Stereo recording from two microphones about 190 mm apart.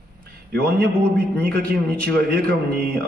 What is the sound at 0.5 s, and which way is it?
A man's voice, 60° right (ahead or behind).